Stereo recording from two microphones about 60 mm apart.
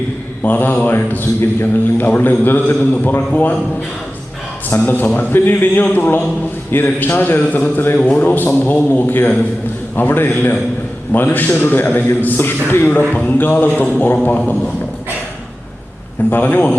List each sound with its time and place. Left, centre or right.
0.4 s a man's voice: left
4.9 s a man's voice: left
7.9 s a man's voice: centre
8.2 s a man's voice: left
16.3 s a man's voice: left